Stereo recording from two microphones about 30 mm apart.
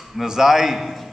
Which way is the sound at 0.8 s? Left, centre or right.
Centre.